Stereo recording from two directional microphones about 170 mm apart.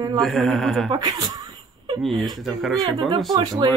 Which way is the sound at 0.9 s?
25° right (ahead or behind).